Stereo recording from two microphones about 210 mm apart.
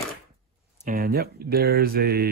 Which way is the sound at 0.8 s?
45° right (ahead or behind).